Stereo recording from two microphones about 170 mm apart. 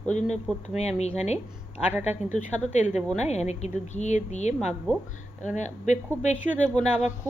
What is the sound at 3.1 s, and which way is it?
Speech, 40° left (ahead or behind).